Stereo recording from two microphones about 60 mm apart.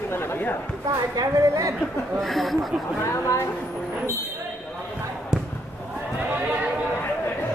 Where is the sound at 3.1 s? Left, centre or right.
Left.